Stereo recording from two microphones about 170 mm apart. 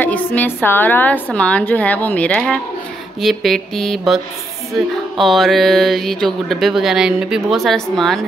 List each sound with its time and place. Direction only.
0.0 s a woman's voice: 10° left (ahead or behind)
3.2 s music: centre (ahead or behind)